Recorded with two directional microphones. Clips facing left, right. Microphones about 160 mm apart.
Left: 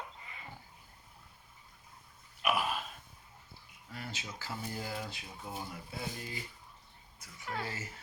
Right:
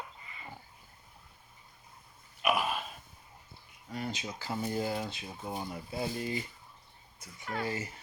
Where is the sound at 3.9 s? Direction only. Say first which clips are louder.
Right 7 dB; 20° right (ahead or behind).